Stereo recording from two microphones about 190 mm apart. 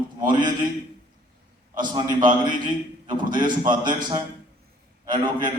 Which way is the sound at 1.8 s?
25° right (ahead or behind).